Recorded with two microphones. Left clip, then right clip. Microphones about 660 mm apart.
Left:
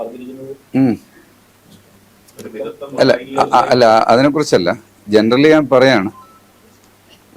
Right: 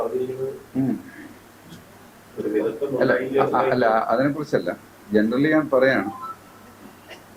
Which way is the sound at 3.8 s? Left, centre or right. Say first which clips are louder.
Left 10 dB; left.